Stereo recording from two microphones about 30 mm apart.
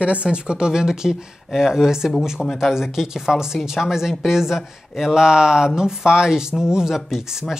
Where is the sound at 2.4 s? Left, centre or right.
Centre.